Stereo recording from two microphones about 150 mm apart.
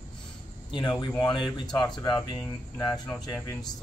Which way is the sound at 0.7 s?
30° left (ahead or behind).